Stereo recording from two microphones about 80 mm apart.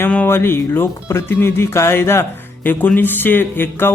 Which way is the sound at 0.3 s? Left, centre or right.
Left.